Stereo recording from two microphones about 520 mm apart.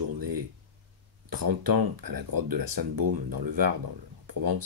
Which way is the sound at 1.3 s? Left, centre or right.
Right.